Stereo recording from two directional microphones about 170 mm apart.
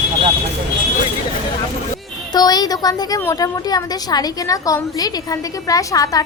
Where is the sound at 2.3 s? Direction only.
25° left (ahead or behind).